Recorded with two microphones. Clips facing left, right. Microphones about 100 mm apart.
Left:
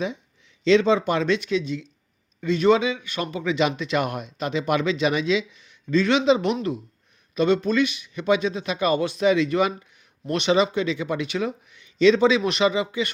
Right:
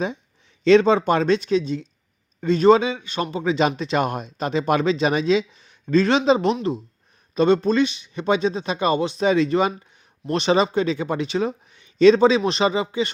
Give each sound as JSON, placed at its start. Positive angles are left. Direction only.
{"t": 0.6, "sound": "speech", "side_deg": -45}
{"t": 9.2, "sound": "speech", "side_deg": -35}